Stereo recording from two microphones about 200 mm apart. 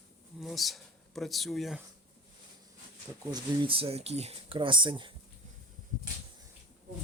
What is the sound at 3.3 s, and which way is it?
Speech, 25° right (ahead or behind).